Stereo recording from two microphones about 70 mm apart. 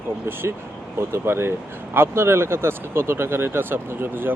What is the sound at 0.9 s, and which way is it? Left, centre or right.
Speech, right.